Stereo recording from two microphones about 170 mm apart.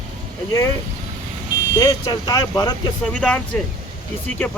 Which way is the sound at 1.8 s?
25° left (ahead or behind).